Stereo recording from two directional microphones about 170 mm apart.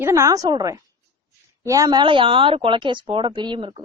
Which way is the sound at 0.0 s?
15° right (ahead or behind).